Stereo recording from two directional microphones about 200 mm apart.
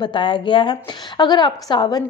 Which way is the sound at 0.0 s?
25° left (ahead or behind).